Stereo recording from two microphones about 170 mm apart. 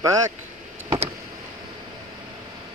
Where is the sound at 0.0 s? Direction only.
20° right (ahead or behind).